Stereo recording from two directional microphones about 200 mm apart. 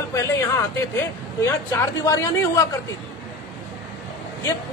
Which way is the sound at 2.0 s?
15° left (ahead or behind).